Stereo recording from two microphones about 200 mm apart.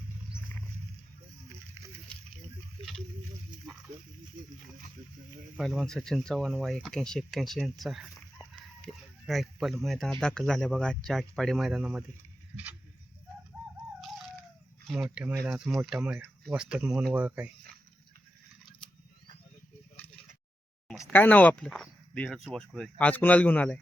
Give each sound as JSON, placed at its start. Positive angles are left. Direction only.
{"t": 1.5, "sound": "a sound", "side_deg": -15}
{"t": 4.4, "sound": "speech", "side_deg": -40}
{"t": 5.5, "sound": "speech", "side_deg": 0}
{"t": 14.0, "sound": "chicken", "side_deg": 0}
{"t": 14.8, "sound": "speech", "side_deg": -5}
{"t": 20.8, "sound": "speech", "side_deg": 5}